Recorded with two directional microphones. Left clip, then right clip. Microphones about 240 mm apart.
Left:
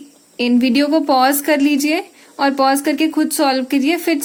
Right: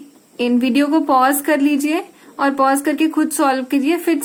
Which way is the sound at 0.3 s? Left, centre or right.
Left.